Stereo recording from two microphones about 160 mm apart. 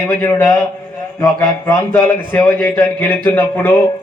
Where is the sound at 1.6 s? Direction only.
15° left (ahead or behind).